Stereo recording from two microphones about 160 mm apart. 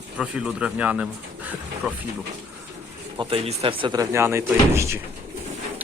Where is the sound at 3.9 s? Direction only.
15° right (ahead or behind).